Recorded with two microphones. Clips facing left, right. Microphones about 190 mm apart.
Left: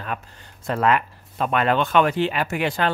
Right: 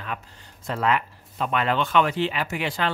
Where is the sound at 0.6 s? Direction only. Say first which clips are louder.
Left 4 dB; 55° left (ahead or behind).